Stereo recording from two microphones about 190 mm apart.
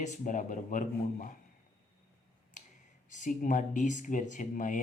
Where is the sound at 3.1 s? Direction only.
40° left (ahead or behind).